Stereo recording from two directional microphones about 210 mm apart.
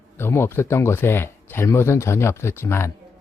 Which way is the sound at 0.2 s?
10° left (ahead or behind).